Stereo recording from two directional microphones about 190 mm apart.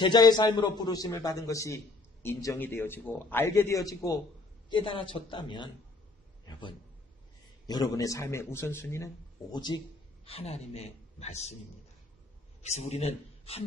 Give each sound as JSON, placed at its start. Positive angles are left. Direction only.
{"t": 0.0, "sound": "a man's voice", "side_deg": 20}
{"t": 7.6, "sound": "a man's voice", "side_deg": 20}
{"t": 10.2, "sound": "a man's voice", "side_deg": 30}
{"t": 12.6, "sound": "a man's voice", "side_deg": 35}